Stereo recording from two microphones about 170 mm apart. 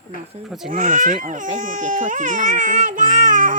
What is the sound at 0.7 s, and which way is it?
Speech, 50° right (ahead or behind).